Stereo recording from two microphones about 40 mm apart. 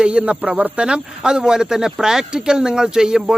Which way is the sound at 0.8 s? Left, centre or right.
Centre.